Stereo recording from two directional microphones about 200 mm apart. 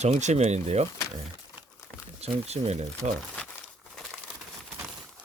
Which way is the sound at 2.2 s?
30° right (ahead or behind).